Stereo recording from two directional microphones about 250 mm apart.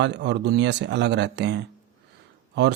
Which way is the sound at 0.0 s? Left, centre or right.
Right.